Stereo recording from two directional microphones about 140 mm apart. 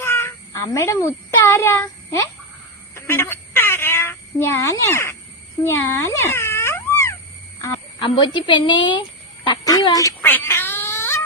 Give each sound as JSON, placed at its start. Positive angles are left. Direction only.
{"t": 0.0, "sound": "a child's voice", "side_deg": 15}
{"t": 2.9, "sound": "frog", "side_deg": 15}
{"t": 5.6, "sound": "a sound", "side_deg": 20}
{"t": 8.0, "sound": "a woman's voice", "side_deg": 35}
{"t": 10.2, "sound": "cat", "side_deg": 15}